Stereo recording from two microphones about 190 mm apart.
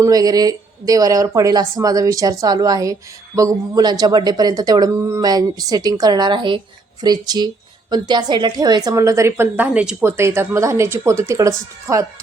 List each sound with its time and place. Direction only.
0.0 s a woman's voice: 20° right (ahead or behind)